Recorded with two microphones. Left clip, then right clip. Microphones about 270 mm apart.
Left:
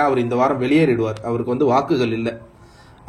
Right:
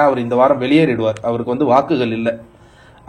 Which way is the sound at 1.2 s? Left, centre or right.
Right.